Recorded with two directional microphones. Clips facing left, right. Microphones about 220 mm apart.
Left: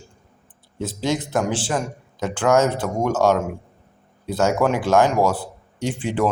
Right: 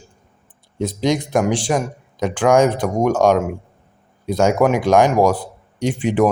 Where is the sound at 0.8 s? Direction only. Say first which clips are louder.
Right 4 dB; 15° right (ahead or behind).